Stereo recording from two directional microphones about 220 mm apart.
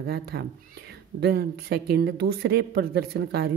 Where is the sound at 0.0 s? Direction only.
45° right (ahead or behind).